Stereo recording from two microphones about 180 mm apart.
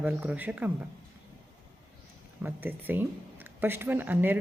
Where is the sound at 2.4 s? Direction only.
10° right (ahead or behind).